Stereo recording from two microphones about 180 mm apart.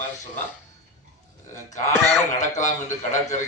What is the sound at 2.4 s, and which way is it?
Speech, 40° left (ahead or behind).